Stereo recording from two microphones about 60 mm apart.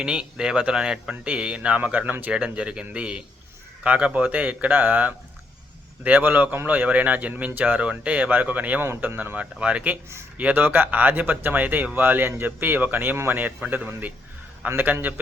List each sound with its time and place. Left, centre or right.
0.0 s speech: centre
8.8 s speech: right
10.5 s speech: right